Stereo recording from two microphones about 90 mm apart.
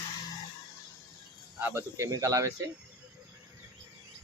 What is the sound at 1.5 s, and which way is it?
Speech, 25° right (ahead or behind).